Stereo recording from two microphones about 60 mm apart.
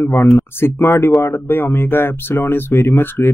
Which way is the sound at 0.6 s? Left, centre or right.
Left.